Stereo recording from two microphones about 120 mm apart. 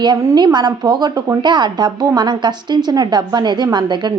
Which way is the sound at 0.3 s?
35° right (ahead or behind).